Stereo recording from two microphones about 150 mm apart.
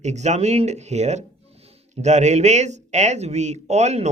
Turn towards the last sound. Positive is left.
turn(degrees=-45)  # may be behind; listen again after turning